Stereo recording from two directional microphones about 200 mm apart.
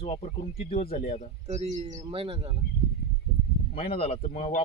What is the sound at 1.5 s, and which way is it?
Speech, 35° right (ahead or behind).